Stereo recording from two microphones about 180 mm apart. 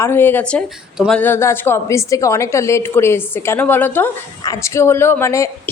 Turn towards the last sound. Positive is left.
turn(degrees=15)  # may be behind; listen again after turning